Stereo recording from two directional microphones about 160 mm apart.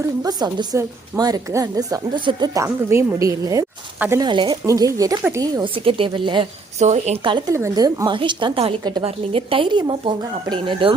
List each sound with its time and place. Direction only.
0.2 s a woman's voice: 25° right (ahead or behind)
2.6 s a woman's voice: 15° right (ahead or behind); by 4.5 s 30° right (ahead or behind)
4.6 s a woman's voice: 20° right (ahead or behind)
6.7 s speech: 45° right (ahead or behind)
7.3 s a woman's voice: 30° right (ahead or behind)